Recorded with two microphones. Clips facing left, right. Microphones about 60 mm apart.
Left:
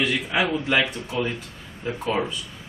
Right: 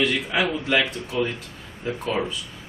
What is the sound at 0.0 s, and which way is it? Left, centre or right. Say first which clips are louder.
Speech: right 1 dB; centre.